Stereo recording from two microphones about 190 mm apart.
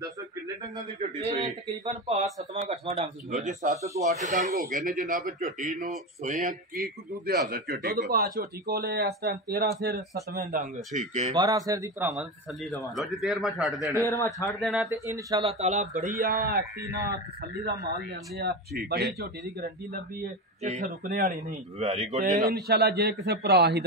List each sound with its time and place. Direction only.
1.9 s a man's voice: 35° right (ahead or behind)
3.7 s a man's voice: 15° right (ahead or behind)
4.1 s a man's voice: 40° right (ahead or behind)
11.3 s a man's voice: 20° right (ahead or behind)
12.6 s a man's voice: centre (ahead or behind)
14.0 s a man's voice: 10° left (ahead or behind)
14.6 s a man's voice: centre (ahead or behind)
14.9 s a man's voice: 15° right (ahead or behind)
15.4 s a man's voice: 35° right (ahead or behind); by 19.3 s 60° right (ahead or behind)
19.6 s speech: 50° right (ahead or behind)
21.1 s a man's voice: 55° right (ahead or behind); by 22.4 s 40° right (ahead or behind)
22.5 s a man's voice: 55° right (ahead or behind)